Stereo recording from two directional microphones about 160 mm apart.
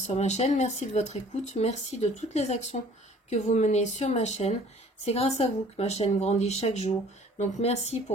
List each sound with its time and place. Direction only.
0.0 s speech: 45° left (ahead or behind)